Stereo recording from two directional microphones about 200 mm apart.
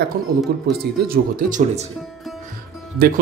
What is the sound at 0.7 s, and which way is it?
Speech, 45° right (ahead or behind).